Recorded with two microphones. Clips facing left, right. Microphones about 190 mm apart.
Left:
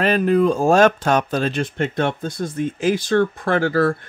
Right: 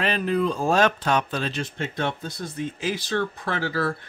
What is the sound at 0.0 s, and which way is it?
Speech, 45° left (ahead or behind).